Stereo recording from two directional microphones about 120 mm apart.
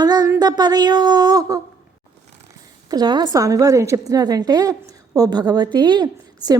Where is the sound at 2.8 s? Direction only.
35° right (ahead or behind).